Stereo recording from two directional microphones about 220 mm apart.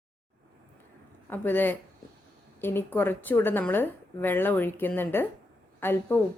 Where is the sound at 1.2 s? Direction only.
10° left (ahead or behind).